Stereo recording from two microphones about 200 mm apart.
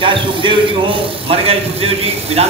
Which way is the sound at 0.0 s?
25° right (ahead or behind).